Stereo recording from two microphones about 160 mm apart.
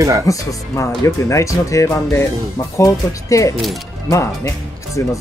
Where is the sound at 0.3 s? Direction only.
20° left (ahead or behind).